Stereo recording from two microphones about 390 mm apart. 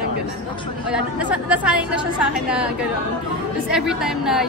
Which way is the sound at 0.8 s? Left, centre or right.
Centre.